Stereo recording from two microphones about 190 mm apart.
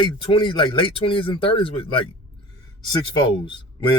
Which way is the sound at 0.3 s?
25° left (ahead or behind).